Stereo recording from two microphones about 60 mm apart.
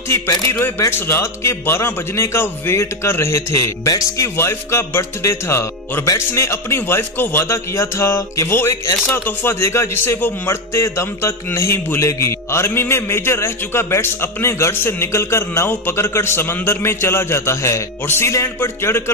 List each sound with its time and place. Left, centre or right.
0.5 s a man's voice: left
4.4 s a man's voice: left
9.1 s a man's voice: left